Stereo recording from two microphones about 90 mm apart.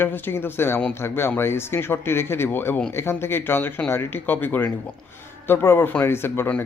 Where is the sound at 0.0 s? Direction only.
25° left (ahead or behind).